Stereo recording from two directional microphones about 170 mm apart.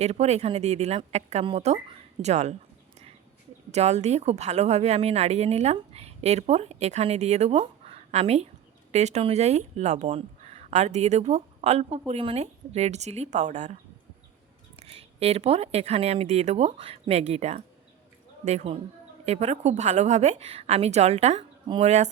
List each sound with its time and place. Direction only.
0.0 s speech: 40° right (ahead or behind)
3.7 s speech: 40° right (ahead or behind)
14.8 s speech: 35° right (ahead or behind)